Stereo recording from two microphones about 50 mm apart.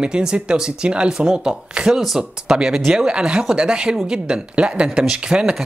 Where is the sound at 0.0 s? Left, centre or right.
Centre.